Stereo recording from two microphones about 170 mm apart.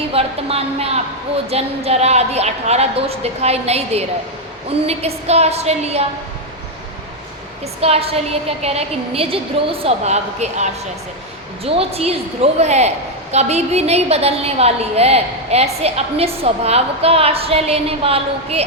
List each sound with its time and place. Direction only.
0.1 s a woman's voice: 35° right (ahead or behind)
7.8 s a woman's voice: 35° right (ahead or behind)